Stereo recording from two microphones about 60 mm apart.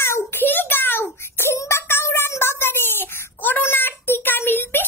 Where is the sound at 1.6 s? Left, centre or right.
Left.